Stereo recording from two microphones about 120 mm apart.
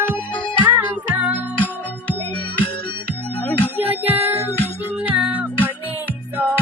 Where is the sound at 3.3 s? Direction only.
15° left (ahead or behind).